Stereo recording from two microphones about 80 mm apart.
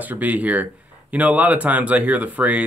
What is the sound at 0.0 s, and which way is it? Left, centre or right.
Speech, right.